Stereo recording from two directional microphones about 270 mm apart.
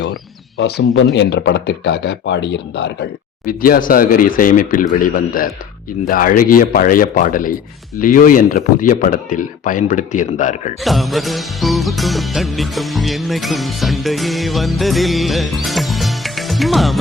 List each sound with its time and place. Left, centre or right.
0.0 s a sound: left
1.1 s speech: left
10.8 s music: centre